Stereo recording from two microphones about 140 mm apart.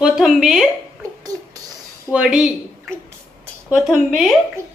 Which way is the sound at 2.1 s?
5° right (ahead or behind).